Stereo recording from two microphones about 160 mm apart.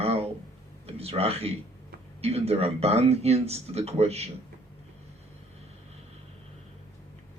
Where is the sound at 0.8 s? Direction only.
40° right (ahead or behind).